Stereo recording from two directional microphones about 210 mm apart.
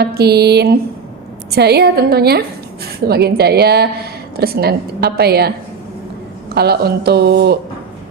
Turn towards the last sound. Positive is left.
turn(degrees=-50)  # may be behind; listen again after turning